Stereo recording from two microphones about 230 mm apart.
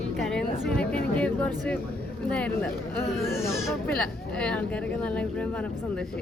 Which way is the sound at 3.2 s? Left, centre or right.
Centre.